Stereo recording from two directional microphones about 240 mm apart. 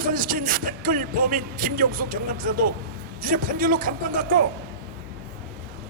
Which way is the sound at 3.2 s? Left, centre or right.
Right.